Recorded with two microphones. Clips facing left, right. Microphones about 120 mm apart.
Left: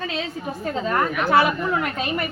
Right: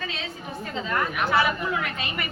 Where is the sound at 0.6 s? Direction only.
45° left (ahead or behind).